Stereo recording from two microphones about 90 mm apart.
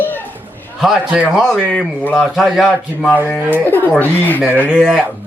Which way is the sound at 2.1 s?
Centre (ahead or behind).